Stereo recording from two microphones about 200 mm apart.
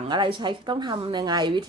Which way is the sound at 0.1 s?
25° right (ahead or behind).